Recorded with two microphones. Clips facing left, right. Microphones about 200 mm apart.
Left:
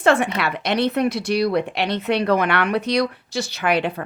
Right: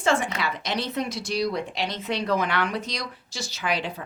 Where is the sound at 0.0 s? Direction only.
65° left (ahead or behind).